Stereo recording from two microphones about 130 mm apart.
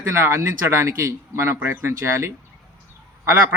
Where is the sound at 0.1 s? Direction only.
20° right (ahead or behind).